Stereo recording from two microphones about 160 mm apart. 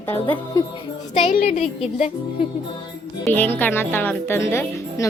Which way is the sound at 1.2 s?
40° left (ahead or behind).